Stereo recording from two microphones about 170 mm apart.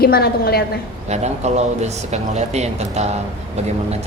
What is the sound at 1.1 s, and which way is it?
Speech, 40° right (ahead or behind).